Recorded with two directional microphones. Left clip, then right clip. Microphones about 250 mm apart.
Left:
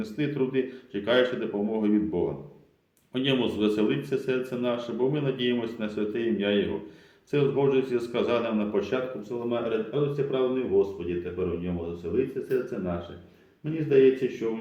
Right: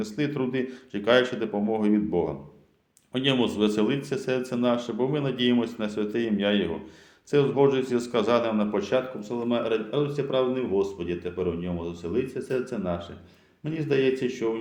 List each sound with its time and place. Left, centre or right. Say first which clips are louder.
0.0 s a man's voice: even; right